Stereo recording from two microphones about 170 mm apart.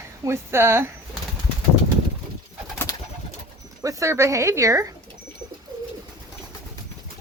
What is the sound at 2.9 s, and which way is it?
Pigeon, 20° left (ahead or behind).